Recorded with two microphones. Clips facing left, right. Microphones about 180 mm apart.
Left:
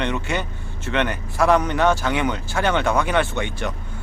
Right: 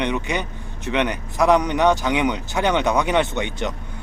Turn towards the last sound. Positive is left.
turn(degrees=-20)  # may be behind; listen again after turning